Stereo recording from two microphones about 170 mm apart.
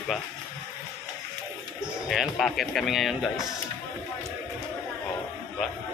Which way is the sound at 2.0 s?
Centre (ahead or behind).